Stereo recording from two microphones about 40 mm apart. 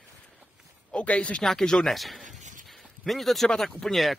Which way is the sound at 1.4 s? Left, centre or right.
Centre.